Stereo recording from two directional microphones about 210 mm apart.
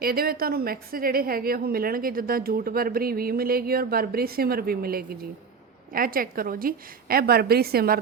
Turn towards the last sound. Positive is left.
turn(degrees=-45)  # may be behind; listen again after turning